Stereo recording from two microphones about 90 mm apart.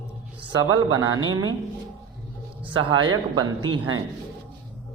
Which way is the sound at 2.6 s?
65° right (ahead or behind).